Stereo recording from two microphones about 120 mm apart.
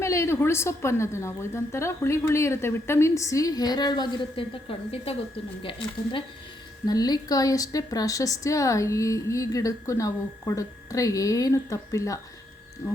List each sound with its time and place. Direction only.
0.0 s a woman's voice: 25° left (ahead or behind)
5.6 s speech: 45° left (ahead or behind)
6.8 s a woman's voice: 35° left (ahead or behind)